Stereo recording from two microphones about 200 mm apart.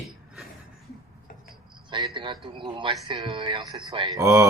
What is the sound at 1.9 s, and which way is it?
A man's voice, 25° right (ahead or behind).